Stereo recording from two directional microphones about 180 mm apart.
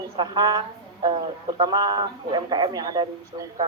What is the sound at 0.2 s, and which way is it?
Speech, 25° right (ahead or behind).